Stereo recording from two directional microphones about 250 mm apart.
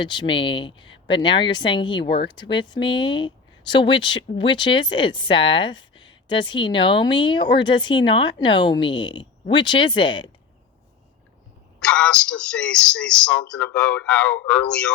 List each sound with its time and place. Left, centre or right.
0.0 s speech: centre
11.8 s speech: centre